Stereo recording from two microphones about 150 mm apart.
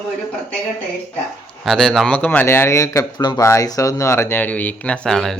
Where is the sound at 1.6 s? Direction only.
Centre (ahead or behind).